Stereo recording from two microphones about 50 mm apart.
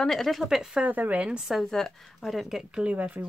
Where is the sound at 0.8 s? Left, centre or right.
Right.